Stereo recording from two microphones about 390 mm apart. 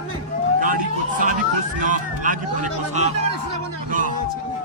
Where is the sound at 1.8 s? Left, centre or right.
Centre.